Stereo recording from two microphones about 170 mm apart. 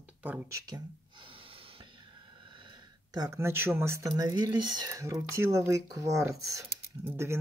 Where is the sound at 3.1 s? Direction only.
20° right (ahead or behind).